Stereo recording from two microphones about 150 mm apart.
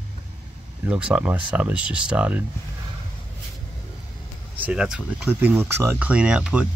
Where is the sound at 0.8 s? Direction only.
10° right (ahead or behind).